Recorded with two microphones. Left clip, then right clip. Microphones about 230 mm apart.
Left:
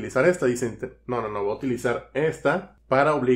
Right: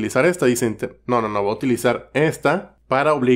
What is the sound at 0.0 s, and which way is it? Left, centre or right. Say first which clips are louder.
Speech: right 4 dB; right.